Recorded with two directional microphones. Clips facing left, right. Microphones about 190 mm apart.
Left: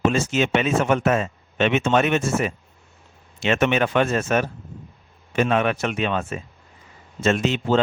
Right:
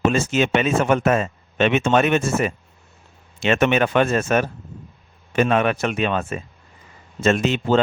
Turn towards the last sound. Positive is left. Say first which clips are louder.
# right 2 dB
turn(degrees=-50)  # may be behind; listen again after turning